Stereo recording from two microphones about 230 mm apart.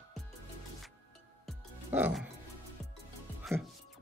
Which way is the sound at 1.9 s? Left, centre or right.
Centre.